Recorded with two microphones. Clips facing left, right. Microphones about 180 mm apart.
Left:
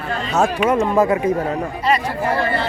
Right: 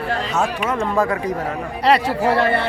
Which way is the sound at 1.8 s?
70° right (ahead or behind).